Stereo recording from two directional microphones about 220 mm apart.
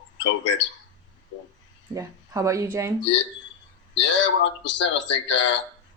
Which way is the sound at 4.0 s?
55° left (ahead or behind).